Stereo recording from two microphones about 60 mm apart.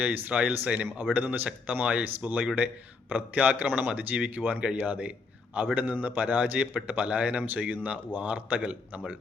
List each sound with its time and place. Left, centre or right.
0.0 s a man's voice: right